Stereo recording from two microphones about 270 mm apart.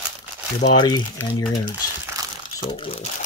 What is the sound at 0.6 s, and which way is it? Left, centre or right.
Speech, centre.